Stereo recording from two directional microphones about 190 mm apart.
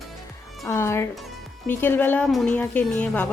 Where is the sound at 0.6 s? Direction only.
15° left (ahead or behind).